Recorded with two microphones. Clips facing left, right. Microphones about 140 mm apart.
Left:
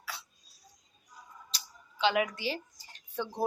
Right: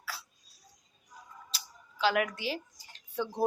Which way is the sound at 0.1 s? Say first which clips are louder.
Even; 5° right (ahead or behind).